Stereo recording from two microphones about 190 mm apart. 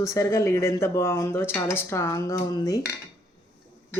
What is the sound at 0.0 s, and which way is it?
Speech, 15° left (ahead or behind).